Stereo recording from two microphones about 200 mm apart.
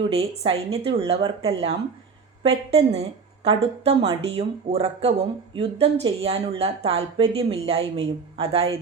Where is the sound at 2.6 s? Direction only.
30° right (ahead or behind).